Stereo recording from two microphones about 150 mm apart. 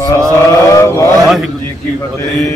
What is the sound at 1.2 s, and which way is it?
Speech, centre (ahead or behind).